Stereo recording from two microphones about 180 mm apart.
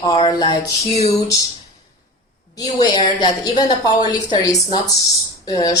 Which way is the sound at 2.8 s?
20° left (ahead or behind).